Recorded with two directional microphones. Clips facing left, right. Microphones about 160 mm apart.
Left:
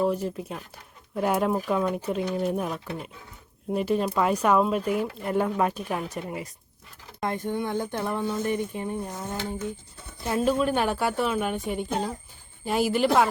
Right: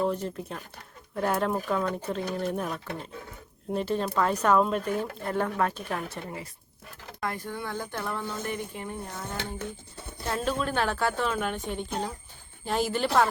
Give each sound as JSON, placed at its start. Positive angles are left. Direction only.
{"t": 0.0, "sound": "speech", "side_deg": 5}
{"t": 10.2, "sound": "speech", "side_deg": 10}